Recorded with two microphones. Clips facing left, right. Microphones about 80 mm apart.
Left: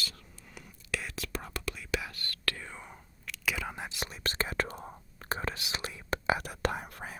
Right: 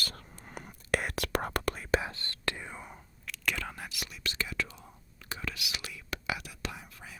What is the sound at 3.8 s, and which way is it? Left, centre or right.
Whispering, left.